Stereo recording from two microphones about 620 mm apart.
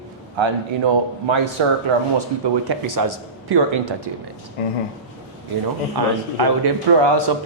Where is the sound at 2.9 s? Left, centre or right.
Right.